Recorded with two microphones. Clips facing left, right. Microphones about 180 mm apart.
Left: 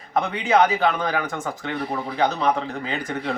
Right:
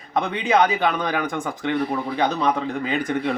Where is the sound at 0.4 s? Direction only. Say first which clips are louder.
Left 1 dB; 15° right (ahead or behind).